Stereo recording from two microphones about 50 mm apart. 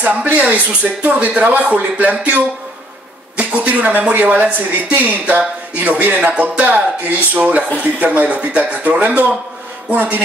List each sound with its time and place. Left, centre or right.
0.0 s speech: right